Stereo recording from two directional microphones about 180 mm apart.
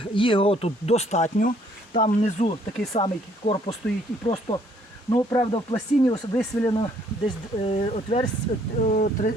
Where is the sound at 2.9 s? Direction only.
30° left (ahead or behind).